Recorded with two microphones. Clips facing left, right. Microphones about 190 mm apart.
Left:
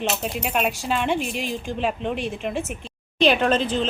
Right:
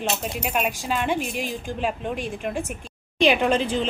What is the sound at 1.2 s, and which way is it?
Speech, 50° right (ahead or behind).